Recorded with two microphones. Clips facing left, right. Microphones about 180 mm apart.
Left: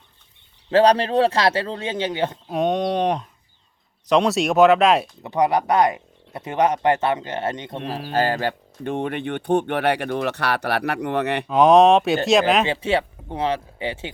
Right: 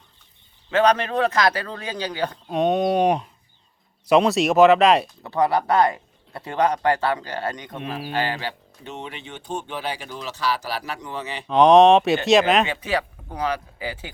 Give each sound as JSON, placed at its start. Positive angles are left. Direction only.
{"t": 0.7, "sound": "speech", "side_deg": 35}
{"t": 2.5, "sound": "speech", "side_deg": 0}
{"t": 5.2, "sound": "speech", "side_deg": 20}
{"t": 8.1, "sound": "speech", "side_deg": 45}
{"t": 11.4, "sound": "speech", "side_deg": 0}
{"t": 12.6, "sound": "speech", "side_deg": 30}